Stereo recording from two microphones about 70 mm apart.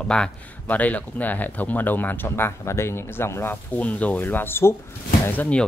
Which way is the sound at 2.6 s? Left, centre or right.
Left.